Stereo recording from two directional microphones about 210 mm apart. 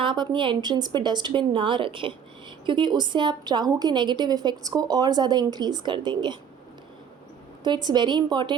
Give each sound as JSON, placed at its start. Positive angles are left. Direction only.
{"t": 0.0, "sound": "a woman's voice", "side_deg": -20}
{"t": 7.6, "sound": "a woman's voice", "side_deg": -20}